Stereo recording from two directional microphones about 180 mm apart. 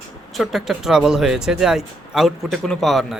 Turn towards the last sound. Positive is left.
turn(degrees=0)  # may be behind; listen again after turning